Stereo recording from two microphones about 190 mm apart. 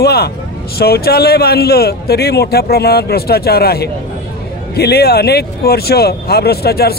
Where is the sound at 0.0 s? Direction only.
55° left (ahead or behind).